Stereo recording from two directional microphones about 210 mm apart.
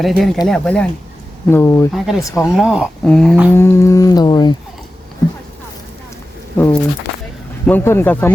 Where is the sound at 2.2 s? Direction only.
15° left (ahead or behind).